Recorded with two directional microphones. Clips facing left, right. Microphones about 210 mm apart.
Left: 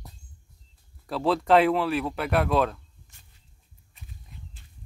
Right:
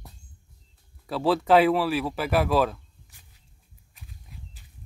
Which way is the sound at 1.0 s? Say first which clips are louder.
Right 1 dB; centre (ahead or behind).